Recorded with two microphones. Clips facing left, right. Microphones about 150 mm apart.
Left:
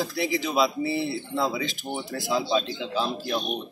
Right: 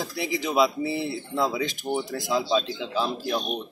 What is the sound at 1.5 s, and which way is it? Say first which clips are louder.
Speech: right 3 dB; centre (ahead or behind).